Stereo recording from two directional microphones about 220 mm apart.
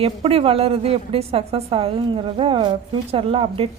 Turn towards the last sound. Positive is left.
turn(degrees=-25)  # may be behind; listen again after turning